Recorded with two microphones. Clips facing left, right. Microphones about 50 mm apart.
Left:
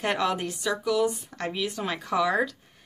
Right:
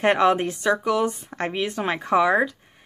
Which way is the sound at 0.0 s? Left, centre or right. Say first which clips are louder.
Right 8 dB; right.